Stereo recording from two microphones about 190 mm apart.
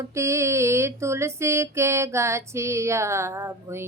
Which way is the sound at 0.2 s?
15° right (ahead or behind).